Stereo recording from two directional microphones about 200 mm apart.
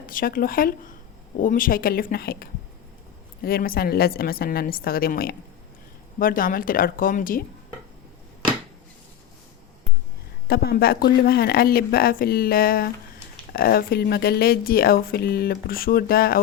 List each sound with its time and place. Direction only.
0.0 s speech: 45° left (ahead or behind)
10.5 s speech: 50° left (ahead or behind)